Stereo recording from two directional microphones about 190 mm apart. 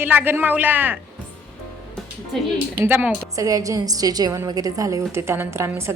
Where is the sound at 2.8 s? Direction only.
10° right (ahead or behind).